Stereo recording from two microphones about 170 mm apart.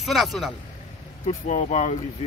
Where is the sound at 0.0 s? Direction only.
Centre (ahead or behind).